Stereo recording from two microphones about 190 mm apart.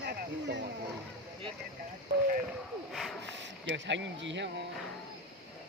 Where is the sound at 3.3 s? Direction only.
70° right (ahead or behind).